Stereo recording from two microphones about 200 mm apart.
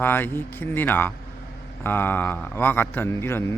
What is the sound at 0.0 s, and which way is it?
A man's voice, 10° left (ahead or behind).